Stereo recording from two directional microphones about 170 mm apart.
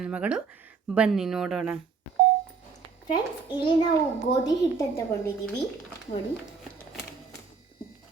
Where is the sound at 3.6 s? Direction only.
30° left (ahead or behind).